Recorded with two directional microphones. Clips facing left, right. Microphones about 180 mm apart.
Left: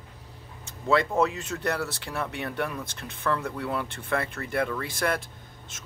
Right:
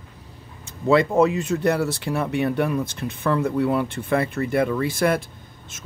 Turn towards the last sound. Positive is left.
turn(degrees=-10)  # may be behind; listen again after turning